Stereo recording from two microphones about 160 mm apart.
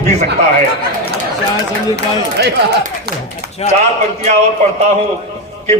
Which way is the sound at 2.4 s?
90° right.